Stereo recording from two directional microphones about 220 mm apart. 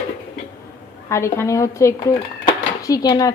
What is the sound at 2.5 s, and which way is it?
Dishes, 15° left (ahead or behind).